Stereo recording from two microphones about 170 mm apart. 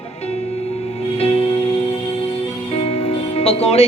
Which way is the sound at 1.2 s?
35° left (ahead or behind).